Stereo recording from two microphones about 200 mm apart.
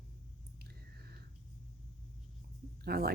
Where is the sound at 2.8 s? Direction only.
50° right (ahead or behind).